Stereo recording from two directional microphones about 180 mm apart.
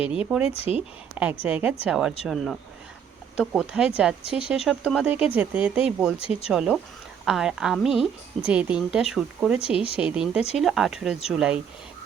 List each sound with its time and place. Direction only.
0.0 s speech: 5° right (ahead or behind)
0.5 s speech: 35° left (ahead or behind)
1.1 s a woman's voice: 10° right (ahead or behind)
6.1 s speech: 35° left (ahead or behind)
6.5 s speech: 5° right (ahead or behind)